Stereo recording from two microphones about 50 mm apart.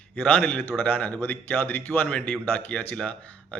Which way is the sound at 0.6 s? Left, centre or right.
Left.